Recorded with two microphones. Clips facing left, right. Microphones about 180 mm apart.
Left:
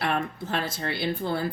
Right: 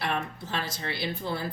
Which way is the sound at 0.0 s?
55° left (ahead or behind).